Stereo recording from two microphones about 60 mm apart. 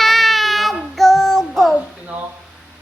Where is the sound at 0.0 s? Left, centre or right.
Centre.